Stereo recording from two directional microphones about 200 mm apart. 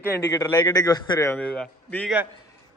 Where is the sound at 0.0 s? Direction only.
15° left (ahead or behind).